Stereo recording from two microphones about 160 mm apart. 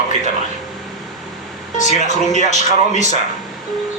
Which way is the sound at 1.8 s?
50° left (ahead or behind).